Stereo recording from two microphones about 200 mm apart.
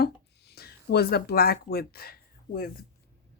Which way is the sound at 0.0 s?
55° left (ahead or behind).